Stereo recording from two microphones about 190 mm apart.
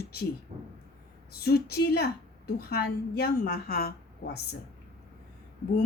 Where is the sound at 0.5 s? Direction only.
35° right (ahead or behind).